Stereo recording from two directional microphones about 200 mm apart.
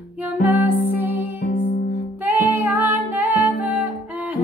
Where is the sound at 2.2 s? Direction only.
10° right (ahead or behind).